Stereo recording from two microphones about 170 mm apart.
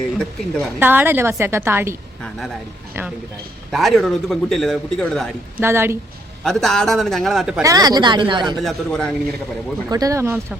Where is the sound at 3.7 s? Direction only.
Centre (ahead or behind).